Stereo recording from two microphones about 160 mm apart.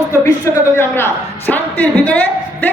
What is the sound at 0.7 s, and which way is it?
A woman's voice, 15° left (ahead or behind).